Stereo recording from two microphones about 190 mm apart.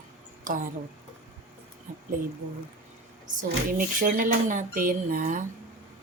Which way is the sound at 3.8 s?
45° right (ahead or behind).